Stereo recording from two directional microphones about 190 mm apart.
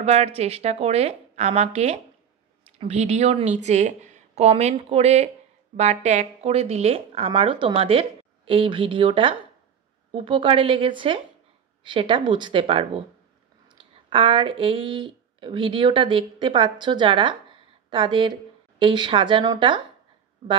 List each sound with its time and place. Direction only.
0.0 s a woman's voice: 35° right (ahead or behind)